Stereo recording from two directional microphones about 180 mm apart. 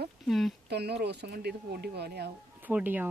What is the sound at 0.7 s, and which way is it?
Speech, 65° right (ahead or behind).